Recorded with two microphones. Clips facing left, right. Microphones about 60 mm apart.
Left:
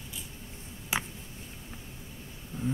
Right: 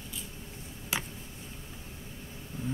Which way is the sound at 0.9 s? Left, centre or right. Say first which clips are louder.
Left 2 dB; left.